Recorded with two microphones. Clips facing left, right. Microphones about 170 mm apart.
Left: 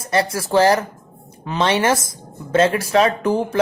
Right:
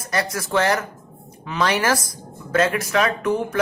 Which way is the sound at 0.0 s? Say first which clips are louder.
Left 5 dB; 30° left (ahead or behind).